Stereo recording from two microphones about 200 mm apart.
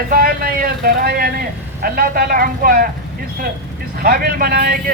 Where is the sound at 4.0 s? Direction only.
45° right (ahead or behind).